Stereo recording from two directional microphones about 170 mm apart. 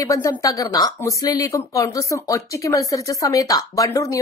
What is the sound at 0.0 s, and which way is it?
Speech, 20° left (ahead or behind).